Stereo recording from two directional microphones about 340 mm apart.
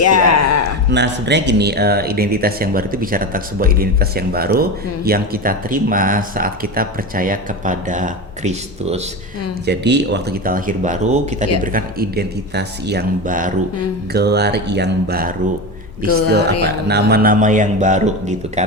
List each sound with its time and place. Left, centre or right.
0.0 s a sound: left
0.9 s speech: right
9.6 s speech: right
16.3 s speech: right